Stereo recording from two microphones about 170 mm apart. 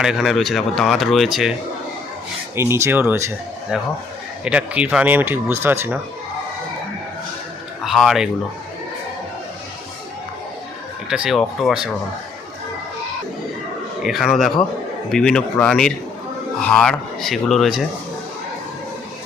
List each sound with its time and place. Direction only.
0.0 s speech: centre (ahead or behind)
2.6 s speech: 15° right (ahead or behind)
7.9 s speech: centre (ahead or behind)
11.1 s speech: 5° right (ahead or behind)
14.0 s speech: centre (ahead or behind)